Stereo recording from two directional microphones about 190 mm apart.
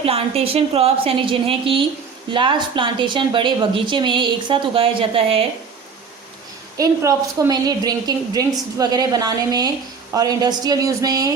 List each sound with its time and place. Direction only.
0.0 s a woman's voice: 30° right (ahead or behind)
6.7 s a woman's voice: 15° right (ahead or behind)